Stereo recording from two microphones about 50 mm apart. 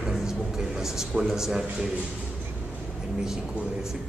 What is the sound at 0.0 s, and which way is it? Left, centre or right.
Music, centre.